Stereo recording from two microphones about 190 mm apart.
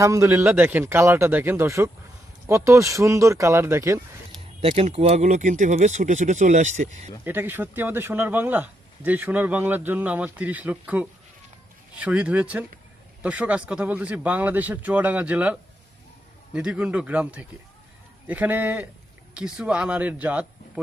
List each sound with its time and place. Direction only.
0.0 s a man's voice: 15° right (ahead or behind)
4.4 s speech: 30° right (ahead or behind)
7.3 s a man's voice: 10° right (ahead or behind)